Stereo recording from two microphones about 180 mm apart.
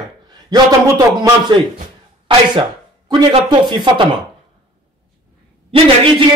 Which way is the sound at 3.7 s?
25° right (ahead or behind).